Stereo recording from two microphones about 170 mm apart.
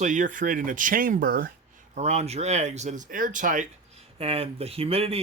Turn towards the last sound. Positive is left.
turn(degrees=-35)  # may be behind; listen again after turning